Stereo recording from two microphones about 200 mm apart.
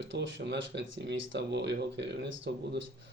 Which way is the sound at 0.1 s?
60° right (ahead or behind).